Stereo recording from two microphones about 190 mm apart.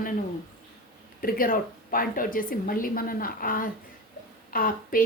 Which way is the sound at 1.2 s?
50° left (ahead or behind).